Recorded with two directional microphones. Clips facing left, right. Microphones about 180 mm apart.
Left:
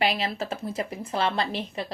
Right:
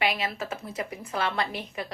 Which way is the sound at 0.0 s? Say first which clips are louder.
Left 2 dB; 30° left (ahead or behind).